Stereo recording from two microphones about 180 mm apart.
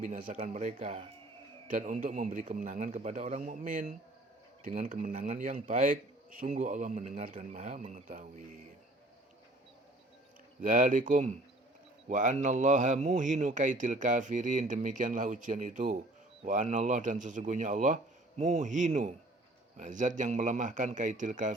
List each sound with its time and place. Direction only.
0.0 s speech: 45° right (ahead or behind)
10.6 s speech: 45° right (ahead or behind)